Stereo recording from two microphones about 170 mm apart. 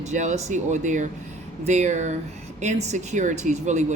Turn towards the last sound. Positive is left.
turn(degrees=-45)  # may be behind; listen again after turning